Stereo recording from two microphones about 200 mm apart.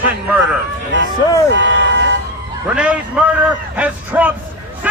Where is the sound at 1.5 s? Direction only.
65° right (ahead or behind).